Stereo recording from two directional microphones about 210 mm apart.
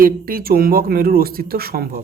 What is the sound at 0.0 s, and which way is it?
Speech, 45° right (ahead or behind).